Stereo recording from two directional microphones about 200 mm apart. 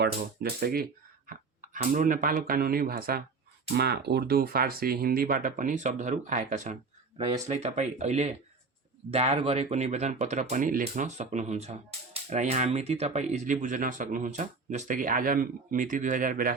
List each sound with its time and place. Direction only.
0.0 s speech: 50° right (ahead or behind)